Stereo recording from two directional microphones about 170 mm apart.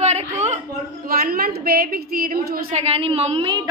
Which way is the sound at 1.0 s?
60° right (ahead or behind).